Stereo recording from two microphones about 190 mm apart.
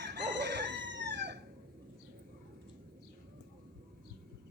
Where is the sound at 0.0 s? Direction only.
65° right (ahead or behind).